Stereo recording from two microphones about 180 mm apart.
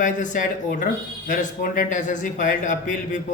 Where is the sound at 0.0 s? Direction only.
45° left (ahead or behind).